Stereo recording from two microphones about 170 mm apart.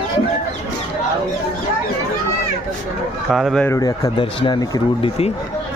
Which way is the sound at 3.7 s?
20° left (ahead or behind).